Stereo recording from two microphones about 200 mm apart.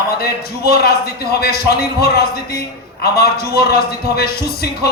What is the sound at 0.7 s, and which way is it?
A man's voice, 50° left (ahead or behind).